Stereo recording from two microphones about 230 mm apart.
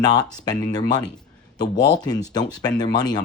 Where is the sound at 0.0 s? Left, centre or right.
Centre.